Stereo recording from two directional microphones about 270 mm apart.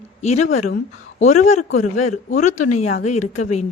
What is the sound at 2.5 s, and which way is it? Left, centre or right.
Speech, left.